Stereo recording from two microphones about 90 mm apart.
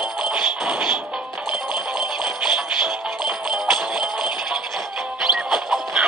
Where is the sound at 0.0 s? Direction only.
5° right (ahead or behind).